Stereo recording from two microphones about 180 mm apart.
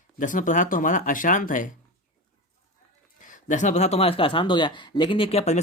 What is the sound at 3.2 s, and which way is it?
Speech, 45° left (ahead or behind).